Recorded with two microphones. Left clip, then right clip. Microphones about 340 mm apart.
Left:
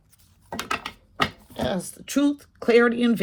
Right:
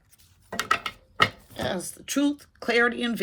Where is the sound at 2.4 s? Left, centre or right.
Left.